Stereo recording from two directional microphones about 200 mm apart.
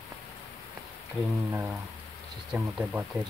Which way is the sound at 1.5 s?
10° right (ahead or behind).